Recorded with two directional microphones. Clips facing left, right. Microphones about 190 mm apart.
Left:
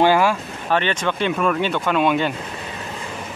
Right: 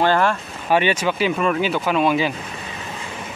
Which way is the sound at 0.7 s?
10° right (ahead or behind).